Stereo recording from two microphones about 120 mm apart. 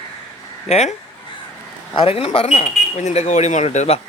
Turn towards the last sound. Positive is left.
turn(degrees=70)  # may be behind; listen again after turning